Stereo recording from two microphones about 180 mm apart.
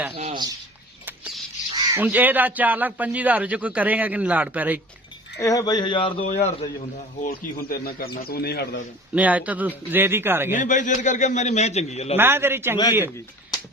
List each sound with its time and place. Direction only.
0.1 s speech: 30° right (ahead or behind)
1.0 s a sound: 10° right (ahead or behind)
1.9 s a man's voice: 10° right (ahead or behind)
5.4 s speech: 20° left (ahead or behind)
6.2 s a man's voice: 40° left (ahead or behind)
7.2 s speech: 55° left (ahead or behind)
9.1 s a man's voice: 10° right (ahead or behind)
10.5 s a man's voice: 45° left (ahead or behind)
12.1 s a man's voice: 10° right (ahead or behind)